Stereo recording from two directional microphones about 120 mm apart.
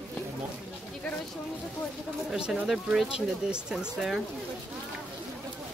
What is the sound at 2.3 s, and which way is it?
Speech, 10° right (ahead or behind).